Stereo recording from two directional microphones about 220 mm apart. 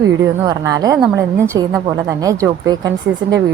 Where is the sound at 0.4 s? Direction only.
15° right (ahead or behind).